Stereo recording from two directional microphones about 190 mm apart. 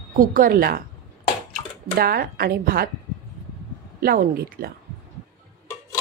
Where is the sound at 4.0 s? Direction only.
55° right (ahead or behind).